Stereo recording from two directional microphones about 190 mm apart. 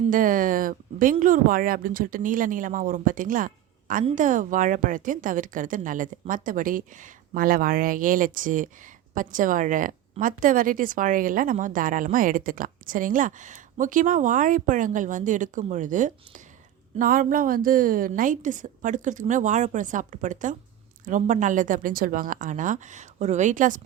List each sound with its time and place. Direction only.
0.1 s a woman's voice: 45° right (ahead or behind)